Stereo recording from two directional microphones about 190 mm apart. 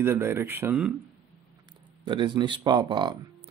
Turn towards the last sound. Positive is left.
turn(degrees=-25)  # may be behind; listen again after turning